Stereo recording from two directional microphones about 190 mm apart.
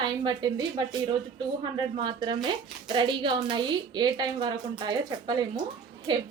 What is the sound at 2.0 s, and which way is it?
Speech, 25° right (ahead or behind).